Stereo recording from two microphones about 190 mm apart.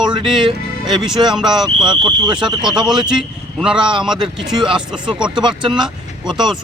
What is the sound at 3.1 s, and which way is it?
A man's voice, 5° right (ahead or behind).